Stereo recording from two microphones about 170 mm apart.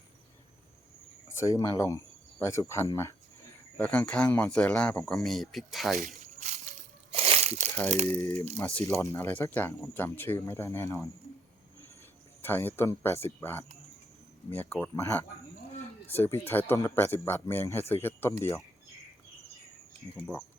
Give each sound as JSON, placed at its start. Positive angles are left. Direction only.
{"t": 1.4, "sound": "speech", "side_deg": 20}
{"t": 6.4, "sound": "a sound", "side_deg": -40}
{"t": 7.9, "sound": "speech", "side_deg": -40}
{"t": 8.1, "sound": "speech", "side_deg": 15}
{"t": 9.1, "sound": "speech", "side_deg": 15}
{"t": 12.4, "sound": "speech", "side_deg": 10}
{"t": 20.1, "sound": "speech", "side_deg": 0}